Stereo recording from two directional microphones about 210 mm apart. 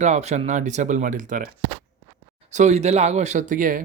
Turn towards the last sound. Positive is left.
turn(degrees=-40)  # may be behind; listen again after turning